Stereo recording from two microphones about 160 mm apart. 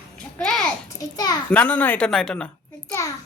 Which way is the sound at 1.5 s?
10° left (ahead or behind).